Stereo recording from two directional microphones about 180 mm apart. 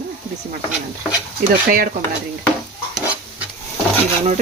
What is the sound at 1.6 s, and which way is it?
Stir, 50° right (ahead or behind).